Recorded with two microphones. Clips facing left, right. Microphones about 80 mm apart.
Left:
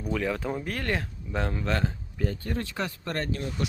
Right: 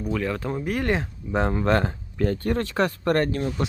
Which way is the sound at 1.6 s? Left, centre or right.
Right.